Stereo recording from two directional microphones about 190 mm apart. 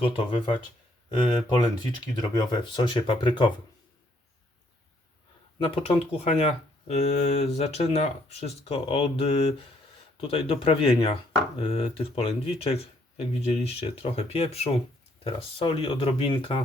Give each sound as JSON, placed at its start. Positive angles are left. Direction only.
{"t": 0.0, "sound": "speech", "side_deg": 30}
{"t": 5.5, "sound": "speech", "side_deg": 30}